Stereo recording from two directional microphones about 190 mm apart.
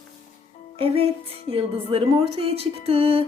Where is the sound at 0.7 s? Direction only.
30° right (ahead or behind).